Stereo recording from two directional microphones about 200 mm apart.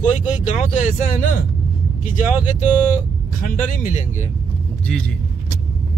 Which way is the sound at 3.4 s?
40° left (ahead or behind).